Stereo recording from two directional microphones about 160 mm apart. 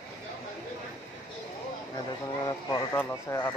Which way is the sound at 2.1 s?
25° left (ahead or behind).